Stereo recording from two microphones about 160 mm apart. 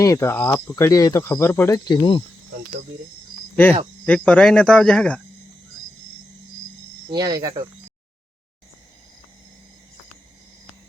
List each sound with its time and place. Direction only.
0.0 s speech: 20° left (ahead or behind)
3.5 s cricket: 10° left (ahead or behind)
4.0 s speech: 5° left (ahead or behind)
7.1 s speech: 25° right (ahead or behind)